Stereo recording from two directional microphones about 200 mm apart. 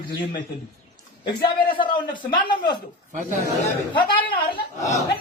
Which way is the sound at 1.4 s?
25° left (ahead or behind).